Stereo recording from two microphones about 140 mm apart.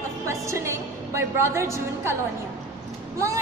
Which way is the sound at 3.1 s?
20° right (ahead or behind).